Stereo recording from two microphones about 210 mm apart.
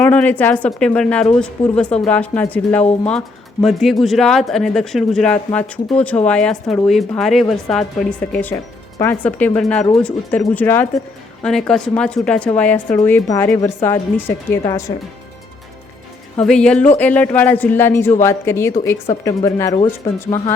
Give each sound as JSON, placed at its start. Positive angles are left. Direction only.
{"t": 0.0, "sound": "speech", "side_deg": 5}
{"t": 16.4, "sound": "speech", "side_deg": 5}